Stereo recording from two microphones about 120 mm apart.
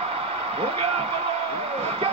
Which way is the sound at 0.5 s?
55° right (ahead or behind).